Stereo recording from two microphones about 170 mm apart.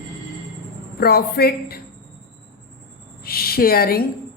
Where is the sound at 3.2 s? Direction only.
65° left (ahead or behind).